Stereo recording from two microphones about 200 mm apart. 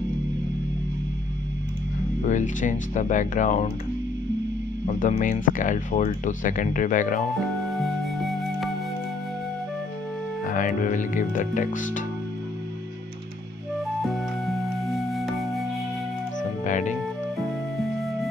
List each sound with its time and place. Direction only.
2.2 s speech: 40° left (ahead or behind)
4.8 s speech: 40° left (ahead or behind)
7.6 s music: centre (ahead or behind)
10.4 s speech: 40° left (ahead or behind)
14.0 s music: centre (ahead or behind)
16.6 s music: 40° left (ahead or behind)